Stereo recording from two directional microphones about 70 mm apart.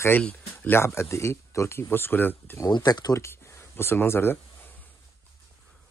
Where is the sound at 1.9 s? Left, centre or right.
Left.